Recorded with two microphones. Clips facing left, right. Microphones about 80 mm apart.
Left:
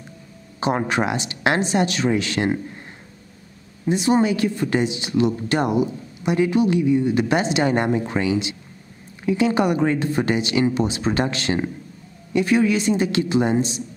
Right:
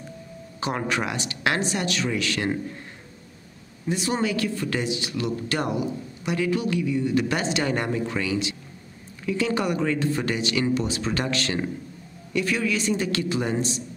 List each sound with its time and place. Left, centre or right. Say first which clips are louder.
0.6 s speech: left 5 dB; left
3.8 s speech: left 7 dB; left